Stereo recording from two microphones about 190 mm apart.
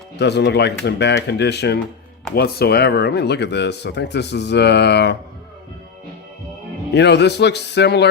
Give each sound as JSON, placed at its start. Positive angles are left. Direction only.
{"t": 0.2, "sound": "speech", "side_deg": 60}
{"t": 6.9, "sound": "speech", "side_deg": 65}